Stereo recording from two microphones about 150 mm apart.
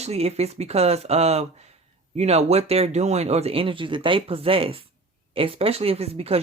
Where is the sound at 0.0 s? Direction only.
45° right (ahead or behind).